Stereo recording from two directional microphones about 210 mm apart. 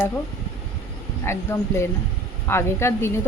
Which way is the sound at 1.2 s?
10° left (ahead or behind).